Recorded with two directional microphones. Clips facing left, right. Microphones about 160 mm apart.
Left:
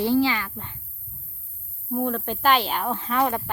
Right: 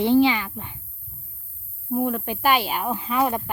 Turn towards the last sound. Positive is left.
turn(degrees=-10)  # may be behind; listen again after turning